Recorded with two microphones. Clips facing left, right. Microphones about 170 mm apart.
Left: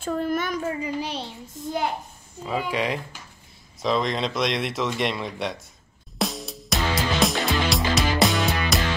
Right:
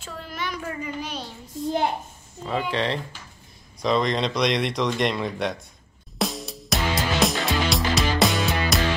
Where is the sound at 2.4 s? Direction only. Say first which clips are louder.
Even; 5° left (ahead or behind).